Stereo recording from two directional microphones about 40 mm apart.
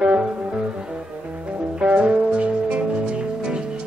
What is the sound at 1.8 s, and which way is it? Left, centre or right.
Music, right.